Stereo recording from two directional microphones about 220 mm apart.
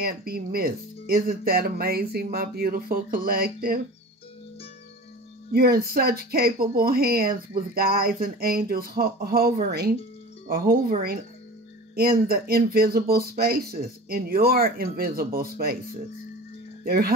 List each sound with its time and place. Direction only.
0.0 s speech: 45° right (ahead or behind)
5.5 s speech: 45° right (ahead or behind)